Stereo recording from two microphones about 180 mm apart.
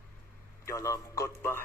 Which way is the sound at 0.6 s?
20° left (ahead or behind).